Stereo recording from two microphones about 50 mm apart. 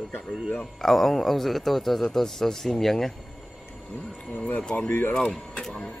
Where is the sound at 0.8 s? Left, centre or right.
Centre.